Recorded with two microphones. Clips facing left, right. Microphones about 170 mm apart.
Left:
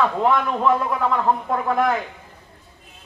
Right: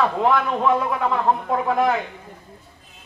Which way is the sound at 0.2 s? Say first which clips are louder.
Even; centre (ahead or behind).